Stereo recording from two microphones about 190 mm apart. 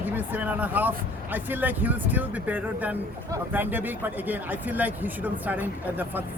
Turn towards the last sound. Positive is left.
turn(degrees=-10)  # may be behind; listen again after turning